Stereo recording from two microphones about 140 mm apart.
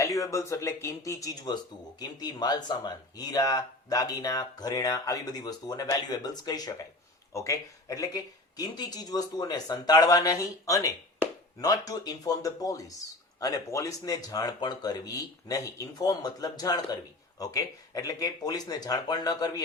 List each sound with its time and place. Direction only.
0.0 s speech: 25° left (ahead or behind)